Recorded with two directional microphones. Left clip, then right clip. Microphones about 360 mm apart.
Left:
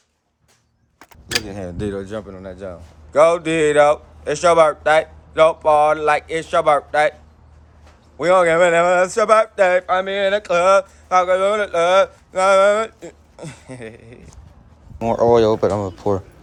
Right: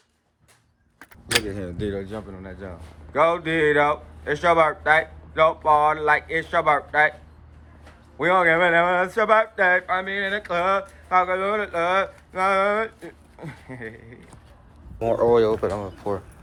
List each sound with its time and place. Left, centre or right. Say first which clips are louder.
1.5 s speech: left 3 dB; centre
8.2 s speech: left 5 dB; centre
14.9 s speech: left 4 dB; left